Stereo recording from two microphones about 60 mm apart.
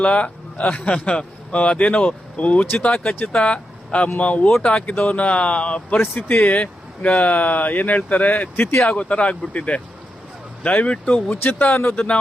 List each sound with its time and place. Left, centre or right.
0.0 s a man's voice: left